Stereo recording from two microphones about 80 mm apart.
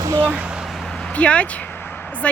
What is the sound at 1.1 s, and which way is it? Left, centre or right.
Speech, centre.